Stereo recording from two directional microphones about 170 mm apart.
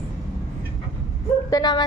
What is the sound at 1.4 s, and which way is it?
Speech, 25° left (ahead or behind).